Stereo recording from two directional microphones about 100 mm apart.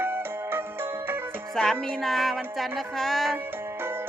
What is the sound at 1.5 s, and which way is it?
Music, 5° left (ahead or behind).